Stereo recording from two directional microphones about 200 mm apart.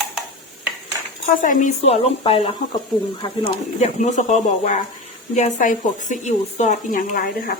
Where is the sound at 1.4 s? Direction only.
40° left (ahead or behind).